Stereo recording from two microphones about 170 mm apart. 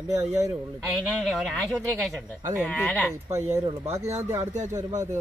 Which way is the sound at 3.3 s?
15° right (ahead or behind).